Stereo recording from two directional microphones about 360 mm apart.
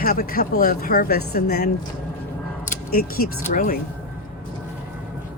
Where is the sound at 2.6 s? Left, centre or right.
Left.